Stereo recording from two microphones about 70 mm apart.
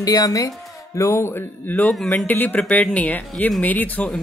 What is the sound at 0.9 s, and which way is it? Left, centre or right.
Speech, left.